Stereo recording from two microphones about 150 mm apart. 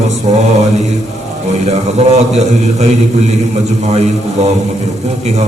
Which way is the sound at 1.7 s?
50° right (ahead or behind).